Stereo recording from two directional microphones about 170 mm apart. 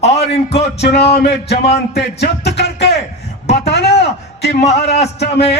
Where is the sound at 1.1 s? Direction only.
80° left.